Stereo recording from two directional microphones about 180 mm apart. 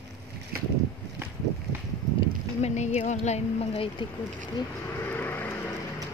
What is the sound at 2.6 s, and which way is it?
Speech, 40° left (ahead or behind).